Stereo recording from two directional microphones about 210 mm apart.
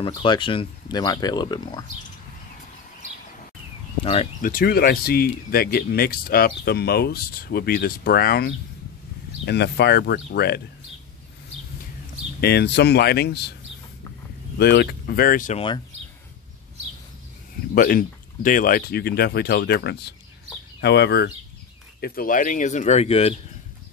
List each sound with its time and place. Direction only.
0.2 s speech: 25° left (ahead or behind)
4.0 s speech: 30° left (ahead or behind)
4.4 s speech: 45° left (ahead or behind)
9.5 s speech: 50° left (ahead or behind)
12.4 s speech: 50° left (ahead or behind)
14.6 s speech: 50° left (ahead or behind)
17.7 s speech: 40° left (ahead or behind)